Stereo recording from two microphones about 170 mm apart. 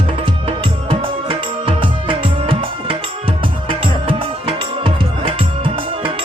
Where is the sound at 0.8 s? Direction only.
30° right (ahead or behind).